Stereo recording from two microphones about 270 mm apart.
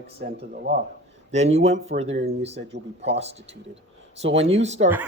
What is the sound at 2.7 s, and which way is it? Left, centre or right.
Speech, right.